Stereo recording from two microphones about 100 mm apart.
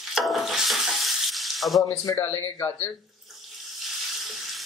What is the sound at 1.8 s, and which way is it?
A man's voice, 30° left (ahead or behind).